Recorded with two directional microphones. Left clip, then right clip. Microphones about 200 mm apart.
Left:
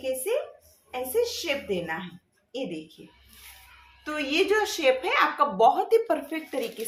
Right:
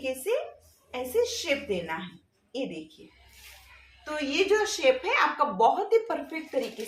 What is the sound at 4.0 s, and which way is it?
Speech, 40° left (ahead or behind).